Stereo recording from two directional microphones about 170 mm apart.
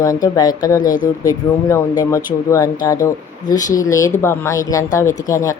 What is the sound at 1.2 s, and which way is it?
Speech, 20° left (ahead or behind).